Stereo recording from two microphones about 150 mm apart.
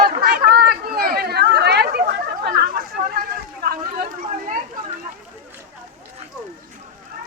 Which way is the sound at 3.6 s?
90° right.